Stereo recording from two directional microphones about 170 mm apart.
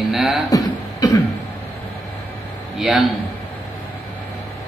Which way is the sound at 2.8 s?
Centre (ahead or behind).